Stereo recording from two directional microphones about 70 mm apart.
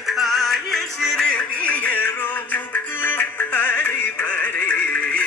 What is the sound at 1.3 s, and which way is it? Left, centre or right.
Music, centre.